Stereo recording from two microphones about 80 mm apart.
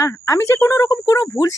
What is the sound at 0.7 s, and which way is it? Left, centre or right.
Speech, left.